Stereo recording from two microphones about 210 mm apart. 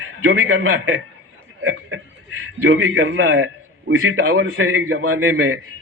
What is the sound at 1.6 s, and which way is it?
A man's voice, 65° right (ahead or behind).